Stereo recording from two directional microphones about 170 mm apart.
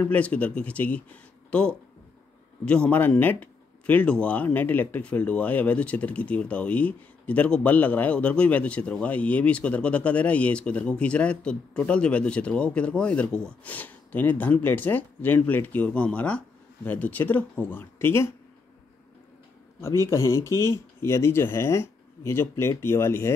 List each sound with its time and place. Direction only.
0.0 s speech: 10° left (ahead or behind)
19.8 s speech: 15° left (ahead or behind)